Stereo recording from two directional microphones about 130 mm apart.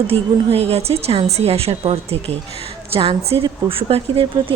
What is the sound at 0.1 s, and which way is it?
A woman's voice, 50° right (ahead or behind).